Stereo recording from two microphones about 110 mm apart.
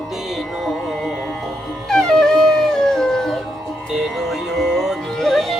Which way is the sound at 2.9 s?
5° left (ahead or behind).